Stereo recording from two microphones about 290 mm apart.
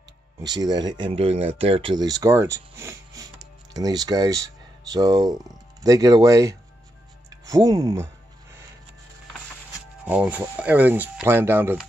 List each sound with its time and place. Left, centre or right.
0.6 s speech: centre
10.0 s speech: centre